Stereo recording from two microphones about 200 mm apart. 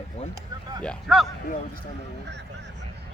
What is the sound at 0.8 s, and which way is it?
Speech, centre (ahead or behind).